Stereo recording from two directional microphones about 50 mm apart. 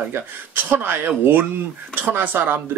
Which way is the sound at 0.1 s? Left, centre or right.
Right.